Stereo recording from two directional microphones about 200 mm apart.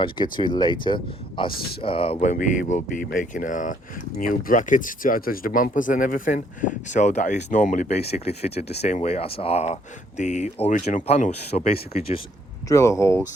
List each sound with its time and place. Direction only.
0.0 s speech: 25° left (ahead or behind)
1.5 s speech: 50° left (ahead or behind)
1.8 s speech: 30° left (ahead or behind)
12.6 s speech: 15° left (ahead or behind)